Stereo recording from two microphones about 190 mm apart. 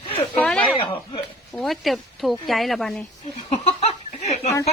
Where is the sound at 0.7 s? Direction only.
30° left (ahead or behind).